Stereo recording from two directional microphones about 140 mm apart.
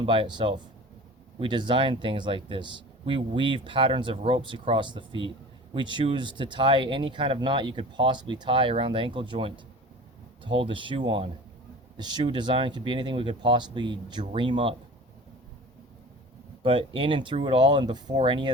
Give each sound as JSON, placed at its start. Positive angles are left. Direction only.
{"t": 0.0, "sound": "speech", "side_deg": -35}
{"t": 16.6, "sound": "speech", "side_deg": -40}